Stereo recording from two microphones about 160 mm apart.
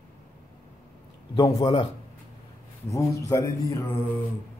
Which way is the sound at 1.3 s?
25° left (ahead or behind).